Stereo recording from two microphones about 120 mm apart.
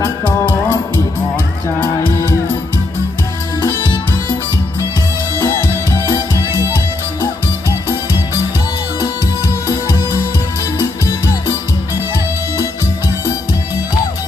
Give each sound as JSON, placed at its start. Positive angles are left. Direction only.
{"t": 0.0, "sound": "music", "side_deg": 15}